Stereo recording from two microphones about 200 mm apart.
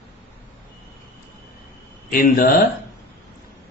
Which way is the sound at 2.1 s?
45° left (ahead or behind).